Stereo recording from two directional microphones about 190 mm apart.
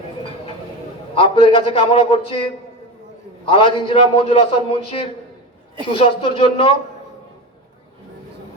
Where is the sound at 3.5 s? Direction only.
30° left (ahead or behind).